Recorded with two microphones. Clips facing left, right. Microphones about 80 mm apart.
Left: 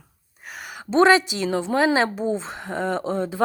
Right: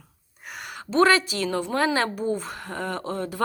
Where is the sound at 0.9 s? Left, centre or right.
Left.